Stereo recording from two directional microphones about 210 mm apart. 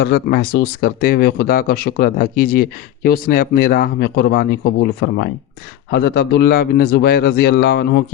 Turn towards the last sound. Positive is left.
turn(degrees=50)  # may be behind; listen again after turning